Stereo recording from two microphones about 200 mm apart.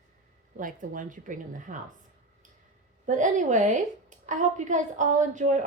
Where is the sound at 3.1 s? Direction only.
40° right (ahead or behind).